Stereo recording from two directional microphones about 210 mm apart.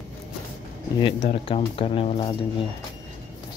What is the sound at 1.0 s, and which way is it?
Speech, 25° left (ahead or behind).